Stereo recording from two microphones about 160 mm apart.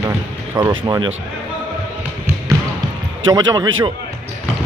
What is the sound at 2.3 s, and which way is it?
Basketball bounce, 15° right (ahead or behind).